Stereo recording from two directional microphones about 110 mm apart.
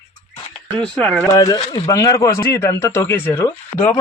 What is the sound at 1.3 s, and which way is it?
Speech, 35° left (ahead or behind).